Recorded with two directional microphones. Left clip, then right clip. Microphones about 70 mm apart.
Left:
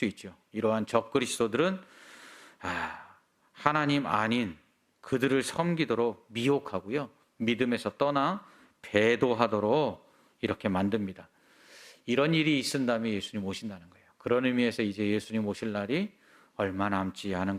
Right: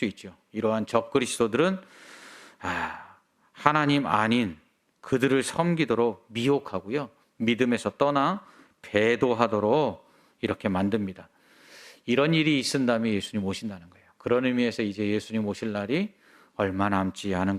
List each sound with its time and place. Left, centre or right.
0.0 s speech: centre; by 8.4 s right
8.8 s speech: centre
11.7 s a sound: right
12.5 s speech: right
16.6 s speech: right